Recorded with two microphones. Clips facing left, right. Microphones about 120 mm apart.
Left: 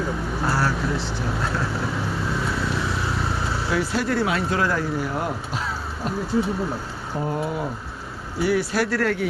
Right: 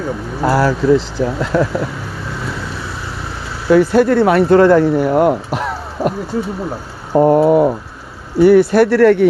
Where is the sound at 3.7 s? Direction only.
55° right (ahead or behind).